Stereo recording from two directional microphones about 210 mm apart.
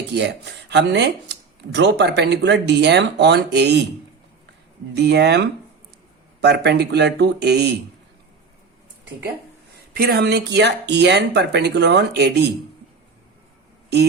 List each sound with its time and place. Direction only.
0.7 s speech: 55° right (ahead or behind)
4.9 s speech: 55° right (ahead or behind)
9.9 s speech: 50° right (ahead or behind)